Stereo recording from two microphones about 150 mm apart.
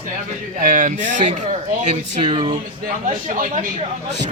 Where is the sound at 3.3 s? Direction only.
60° right (ahead or behind).